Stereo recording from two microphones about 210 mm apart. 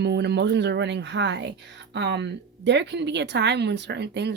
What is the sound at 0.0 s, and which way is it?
Speech, 55° right (ahead or behind).